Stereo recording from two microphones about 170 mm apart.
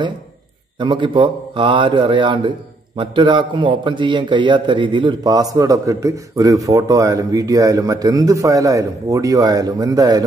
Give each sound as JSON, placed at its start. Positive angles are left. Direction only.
{"t": 0.7, "sound": "a man's voice", "side_deg": -30}